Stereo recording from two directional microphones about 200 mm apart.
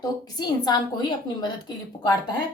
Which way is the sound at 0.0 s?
20° left (ahead or behind).